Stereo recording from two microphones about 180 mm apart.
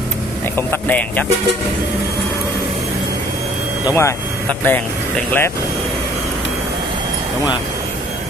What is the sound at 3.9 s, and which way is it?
Speech, 15° left (ahead or behind).